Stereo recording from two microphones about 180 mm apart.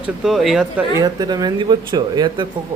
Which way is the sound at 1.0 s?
25° right (ahead or behind).